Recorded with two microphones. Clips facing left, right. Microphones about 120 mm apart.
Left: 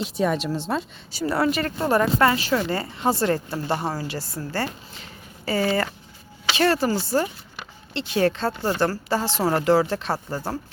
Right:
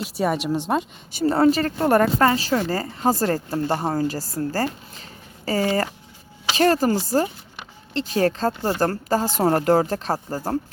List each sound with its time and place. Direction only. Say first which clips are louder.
0.0 s speech: even; 10° right (ahead or behind)
1.2 s a woman's voice: right 5 dB; 30° right (ahead or behind)